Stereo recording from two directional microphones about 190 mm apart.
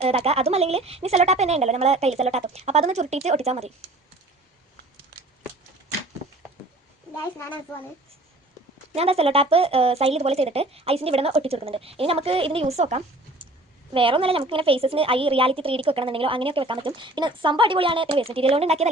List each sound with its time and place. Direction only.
0.0 s speech: 30° right (ahead or behind)
9.0 s a woman's voice: 30° right (ahead or behind)